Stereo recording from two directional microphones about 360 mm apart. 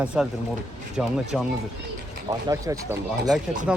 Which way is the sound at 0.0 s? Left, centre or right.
Centre.